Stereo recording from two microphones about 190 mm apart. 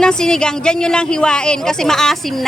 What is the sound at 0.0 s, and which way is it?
A woman's voice, 5° left (ahead or behind).